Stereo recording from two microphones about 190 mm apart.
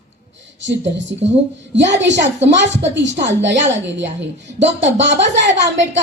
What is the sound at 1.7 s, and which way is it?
A woman's voice, 70° right (ahead or behind).